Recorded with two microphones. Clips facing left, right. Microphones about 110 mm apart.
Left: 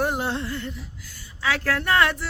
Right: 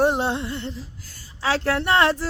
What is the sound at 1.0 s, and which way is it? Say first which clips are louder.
Speech: right 1 dB; 40° right (ahead or behind).